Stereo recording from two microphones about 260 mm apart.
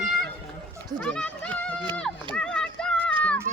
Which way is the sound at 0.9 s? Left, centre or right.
Centre.